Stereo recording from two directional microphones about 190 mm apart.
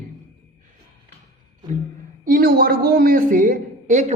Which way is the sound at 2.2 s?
50° right (ahead or behind).